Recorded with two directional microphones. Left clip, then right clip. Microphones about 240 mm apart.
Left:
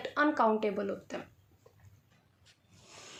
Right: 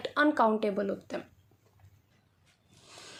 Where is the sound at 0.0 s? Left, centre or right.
Right.